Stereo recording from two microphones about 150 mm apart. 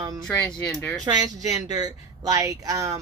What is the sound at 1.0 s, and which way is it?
A woman's voice, 25° right (ahead or behind).